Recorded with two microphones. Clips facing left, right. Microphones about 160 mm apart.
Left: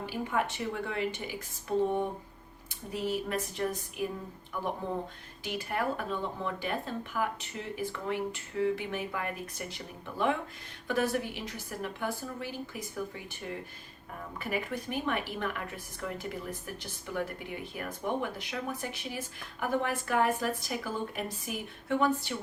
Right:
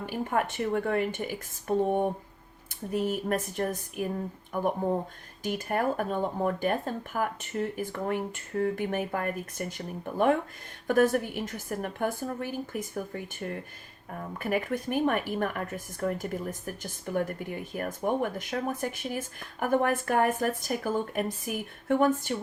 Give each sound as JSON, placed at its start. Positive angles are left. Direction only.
{"t": 0.0, "sound": "speech", "side_deg": -50}